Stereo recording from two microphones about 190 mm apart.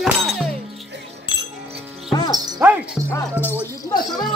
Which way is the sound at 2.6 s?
10° right (ahead or behind).